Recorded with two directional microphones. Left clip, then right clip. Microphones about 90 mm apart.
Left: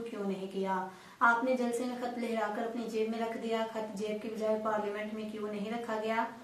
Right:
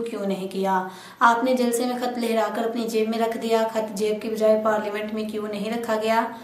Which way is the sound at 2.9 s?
35° right (ahead or behind).